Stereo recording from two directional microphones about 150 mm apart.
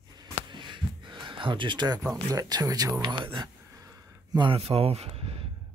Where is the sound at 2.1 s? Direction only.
25° right (ahead or behind); by 5.4 s 40° right (ahead or behind).